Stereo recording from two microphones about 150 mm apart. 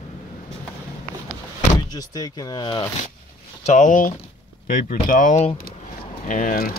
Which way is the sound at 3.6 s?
55° left (ahead or behind).